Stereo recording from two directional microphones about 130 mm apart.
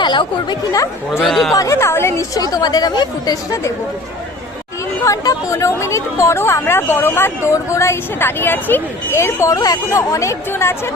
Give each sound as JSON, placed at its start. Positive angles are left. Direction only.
{"t": 0.0, "sound": "a sound", "side_deg": 35}
{"t": 0.7, "sound": "speech", "side_deg": 25}
{"t": 1.2, "sound": "speech", "side_deg": 0}
{"t": 1.5, "sound": "speech", "side_deg": 25}
{"t": 5.0, "sound": "speech", "side_deg": 25}